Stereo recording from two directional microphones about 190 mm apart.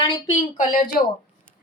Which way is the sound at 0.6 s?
45° left (ahead or behind).